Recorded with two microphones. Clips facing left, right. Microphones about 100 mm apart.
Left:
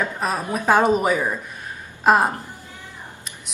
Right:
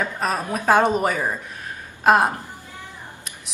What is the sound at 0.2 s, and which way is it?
A woman's voice, 5° left (ahead or behind).